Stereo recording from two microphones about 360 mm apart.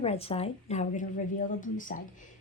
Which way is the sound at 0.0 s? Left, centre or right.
Centre.